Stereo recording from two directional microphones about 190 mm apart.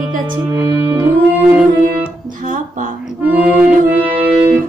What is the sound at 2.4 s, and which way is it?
Music, 45° right (ahead or behind).